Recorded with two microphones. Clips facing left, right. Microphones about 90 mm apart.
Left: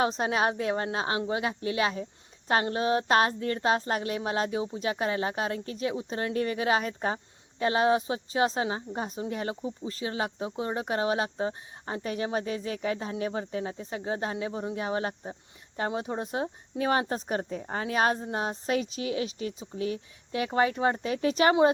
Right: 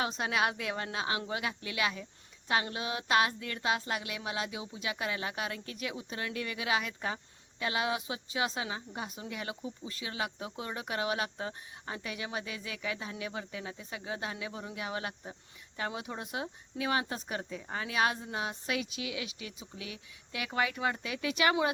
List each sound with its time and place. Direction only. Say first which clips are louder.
0.0 s speech: left 5 dB; 35° left (ahead or behind)